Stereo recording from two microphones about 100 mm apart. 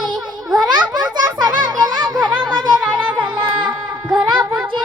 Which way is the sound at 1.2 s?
45° right (ahead or behind).